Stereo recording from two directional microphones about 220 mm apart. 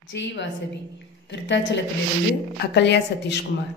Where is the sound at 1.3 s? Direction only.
55° left (ahead or behind).